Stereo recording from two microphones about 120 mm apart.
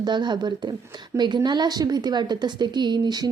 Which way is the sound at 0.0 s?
40° right (ahead or behind).